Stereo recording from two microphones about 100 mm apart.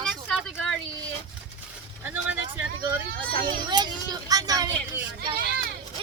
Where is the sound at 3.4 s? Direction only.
45° right (ahead or behind).